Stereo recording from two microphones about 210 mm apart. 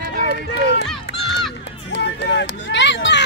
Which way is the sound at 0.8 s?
Centre (ahead or behind).